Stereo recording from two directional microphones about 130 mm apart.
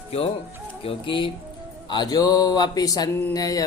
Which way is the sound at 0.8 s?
40° left (ahead or behind).